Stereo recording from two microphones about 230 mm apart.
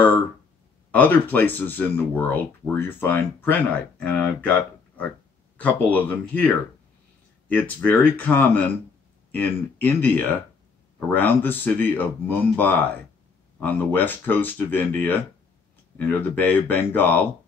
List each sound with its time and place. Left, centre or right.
0.9 s speech: centre